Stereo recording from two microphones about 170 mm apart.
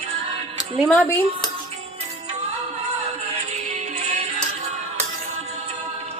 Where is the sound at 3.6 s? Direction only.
40° right (ahead or behind).